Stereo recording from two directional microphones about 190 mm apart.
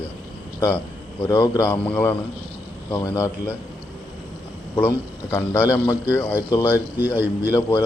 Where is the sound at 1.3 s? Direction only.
15° left (ahead or behind).